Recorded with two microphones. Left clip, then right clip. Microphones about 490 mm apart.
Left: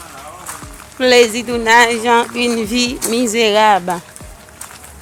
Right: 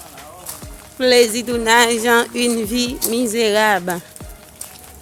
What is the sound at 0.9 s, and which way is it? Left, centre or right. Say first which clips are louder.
Speech: left 3 dB; right.